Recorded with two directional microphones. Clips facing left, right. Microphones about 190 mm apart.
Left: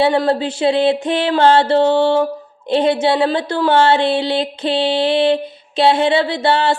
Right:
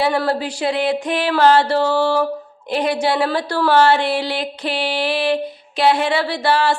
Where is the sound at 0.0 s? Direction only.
25° left (ahead or behind).